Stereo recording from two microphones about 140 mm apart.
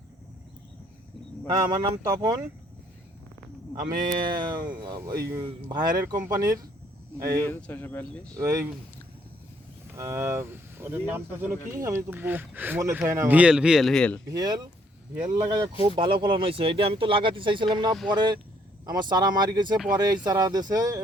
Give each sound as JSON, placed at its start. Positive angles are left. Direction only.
{"t": 1.5, "sound": "speech", "side_deg": -30}
{"t": 3.9, "sound": "speech", "side_deg": -75}
{"t": 4.2, "sound": "speech", "side_deg": -30}
{"t": 7.4, "sound": "speech", "side_deg": 15}
{"t": 8.4, "sound": "speech", "side_deg": -20}
{"t": 10.0, "sound": "speech", "side_deg": -20}
{"t": 14.3, "sound": "speech", "side_deg": -30}